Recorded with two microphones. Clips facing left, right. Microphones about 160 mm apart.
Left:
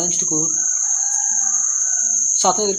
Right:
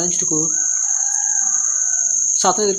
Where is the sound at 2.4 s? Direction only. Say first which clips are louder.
Right 1 dB; 15° left (ahead or behind).